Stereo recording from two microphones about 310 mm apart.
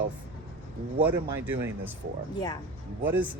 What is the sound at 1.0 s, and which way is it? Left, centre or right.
Speech, centre.